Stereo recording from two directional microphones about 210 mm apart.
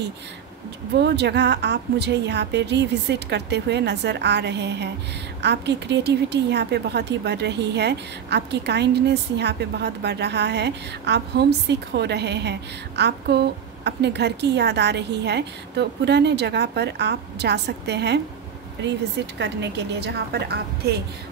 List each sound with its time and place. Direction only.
0.9 s a woman's voice: 55° right (ahead or behind)
19.3 s a woman's voice: 55° right (ahead or behind)